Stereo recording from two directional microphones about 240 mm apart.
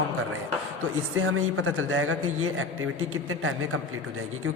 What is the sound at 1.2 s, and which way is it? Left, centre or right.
Speech, right.